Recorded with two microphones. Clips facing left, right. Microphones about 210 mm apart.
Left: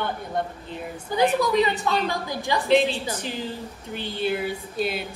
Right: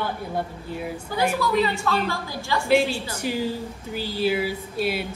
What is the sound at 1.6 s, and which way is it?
A woman's voice, 20° left (ahead or behind).